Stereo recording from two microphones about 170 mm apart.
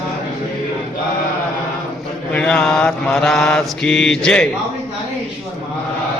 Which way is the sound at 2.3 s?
5° left (ahead or behind).